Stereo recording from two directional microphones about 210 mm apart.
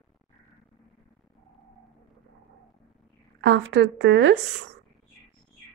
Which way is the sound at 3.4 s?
60° right (ahead or behind).